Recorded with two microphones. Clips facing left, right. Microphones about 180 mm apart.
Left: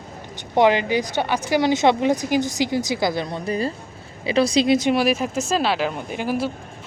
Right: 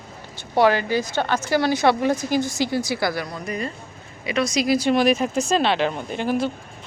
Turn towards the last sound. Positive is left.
turn(degrees=10)  # may be behind; listen again after turning